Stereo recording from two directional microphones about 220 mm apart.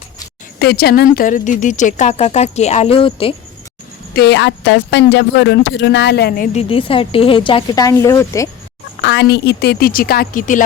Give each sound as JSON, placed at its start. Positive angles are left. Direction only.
{"t": 0.6, "sound": "speech", "side_deg": 45}
{"t": 4.1, "sound": "speech", "side_deg": 50}
{"t": 6.6, "sound": "a woman's voice", "side_deg": 25}
{"t": 9.0, "sound": "a sound", "side_deg": 55}
{"t": 9.3, "sound": "speech", "side_deg": 50}